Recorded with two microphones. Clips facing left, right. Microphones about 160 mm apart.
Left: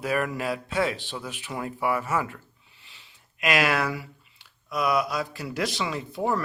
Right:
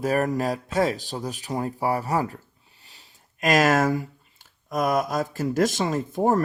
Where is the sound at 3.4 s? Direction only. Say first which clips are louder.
Right 5 dB; 40° right (ahead or behind).